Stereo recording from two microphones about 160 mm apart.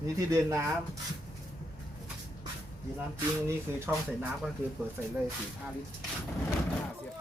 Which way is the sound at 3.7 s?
15° right (ahead or behind).